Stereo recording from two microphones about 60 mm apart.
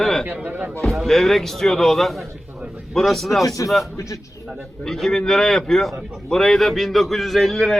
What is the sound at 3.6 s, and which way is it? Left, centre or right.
Speech, left.